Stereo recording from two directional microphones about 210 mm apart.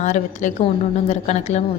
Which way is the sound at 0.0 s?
35° left (ahead or behind).